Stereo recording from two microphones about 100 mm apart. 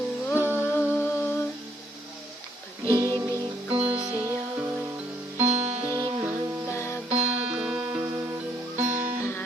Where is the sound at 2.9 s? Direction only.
45° right (ahead or behind).